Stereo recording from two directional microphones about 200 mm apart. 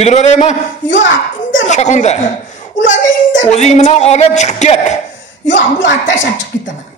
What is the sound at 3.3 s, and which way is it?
Speech, 35° left (ahead or behind).